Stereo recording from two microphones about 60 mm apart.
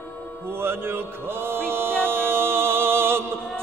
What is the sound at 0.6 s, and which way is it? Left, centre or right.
Music, right.